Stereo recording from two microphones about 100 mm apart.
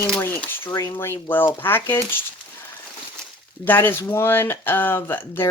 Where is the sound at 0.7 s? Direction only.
35° left (ahead or behind).